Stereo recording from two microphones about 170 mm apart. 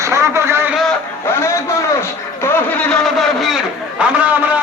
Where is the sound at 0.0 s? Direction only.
15° right (ahead or behind).